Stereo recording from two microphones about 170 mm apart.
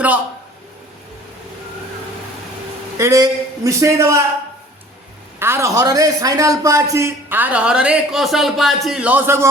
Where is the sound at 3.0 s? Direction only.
20° right (ahead or behind).